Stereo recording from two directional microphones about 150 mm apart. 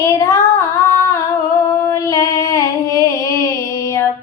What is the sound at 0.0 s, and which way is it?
Female singing, 20° left (ahead or behind).